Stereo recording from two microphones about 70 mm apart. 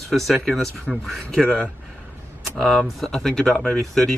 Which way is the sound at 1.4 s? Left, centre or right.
Centre.